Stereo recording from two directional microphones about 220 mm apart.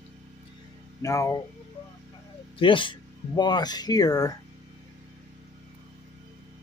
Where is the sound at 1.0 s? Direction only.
15° left (ahead or behind).